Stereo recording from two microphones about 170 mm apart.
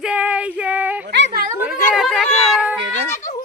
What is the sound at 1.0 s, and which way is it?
Speech, 70° right (ahead or behind).